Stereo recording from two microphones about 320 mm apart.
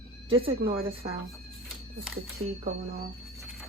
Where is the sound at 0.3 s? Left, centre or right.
Centre.